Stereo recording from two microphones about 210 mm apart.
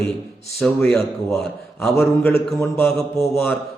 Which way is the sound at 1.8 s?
10° left (ahead or behind).